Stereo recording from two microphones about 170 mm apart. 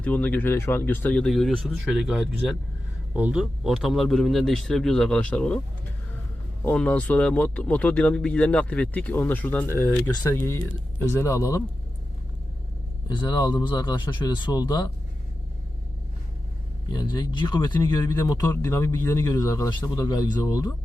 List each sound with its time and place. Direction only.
0.0 s speech: 10° left (ahead or behind)
6.6 s speech: 10° left (ahead or behind)
13.1 s speech: 20° left (ahead or behind)
16.9 s speech: 25° left (ahead or behind)